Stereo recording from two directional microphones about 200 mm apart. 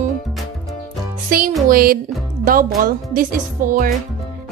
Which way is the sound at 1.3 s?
45° right (ahead or behind).